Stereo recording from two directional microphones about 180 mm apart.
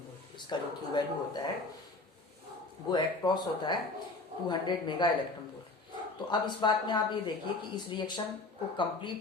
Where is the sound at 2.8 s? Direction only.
25° left (ahead or behind).